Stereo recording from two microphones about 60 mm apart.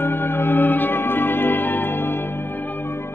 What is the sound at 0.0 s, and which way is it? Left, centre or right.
Music, left.